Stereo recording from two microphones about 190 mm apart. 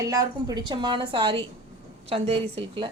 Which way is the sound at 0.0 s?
20° right (ahead or behind).